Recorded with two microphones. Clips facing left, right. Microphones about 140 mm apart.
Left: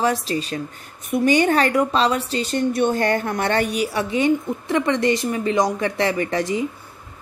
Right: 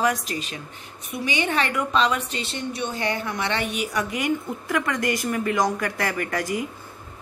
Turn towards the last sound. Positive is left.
turn(degrees=25)  # may be behind; listen again after turning